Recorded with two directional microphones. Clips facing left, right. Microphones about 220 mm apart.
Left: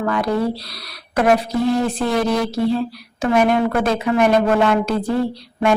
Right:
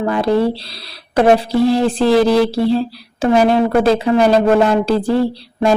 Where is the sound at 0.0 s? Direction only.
30° right (ahead or behind).